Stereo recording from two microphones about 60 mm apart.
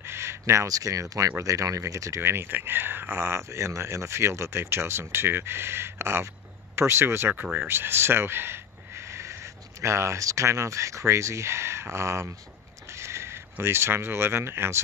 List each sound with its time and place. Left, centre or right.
0.0 s a sound: right
0.7 s speech: right
2.2 s speech: right